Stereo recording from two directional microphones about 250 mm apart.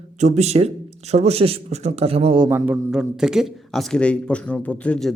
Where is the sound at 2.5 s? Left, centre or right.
Centre.